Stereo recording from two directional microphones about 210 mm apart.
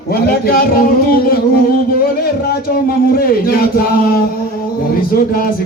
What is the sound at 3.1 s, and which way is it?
Speech, 45° left (ahead or behind).